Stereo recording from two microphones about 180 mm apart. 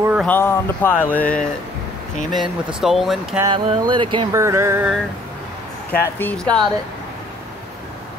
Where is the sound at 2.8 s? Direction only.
Centre (ahead or behind).